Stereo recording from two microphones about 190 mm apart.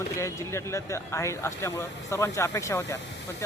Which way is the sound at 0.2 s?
15° left (ahead or behind).